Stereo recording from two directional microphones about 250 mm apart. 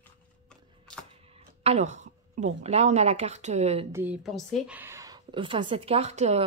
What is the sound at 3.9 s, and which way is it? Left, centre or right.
Speech, centre.